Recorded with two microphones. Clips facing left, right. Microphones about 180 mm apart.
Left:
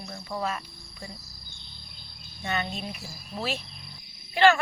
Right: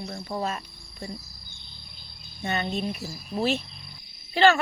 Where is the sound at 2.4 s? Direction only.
35° right (ahead or behind).